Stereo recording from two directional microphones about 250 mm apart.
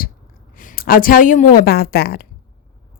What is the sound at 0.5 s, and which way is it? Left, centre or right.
A woman's voice, left.